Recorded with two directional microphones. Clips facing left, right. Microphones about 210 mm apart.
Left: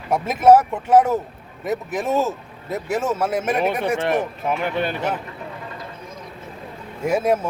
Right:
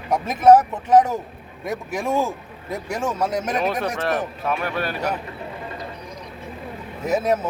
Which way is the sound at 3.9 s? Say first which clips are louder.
Left 2 dB; 25° left (ahead or behind).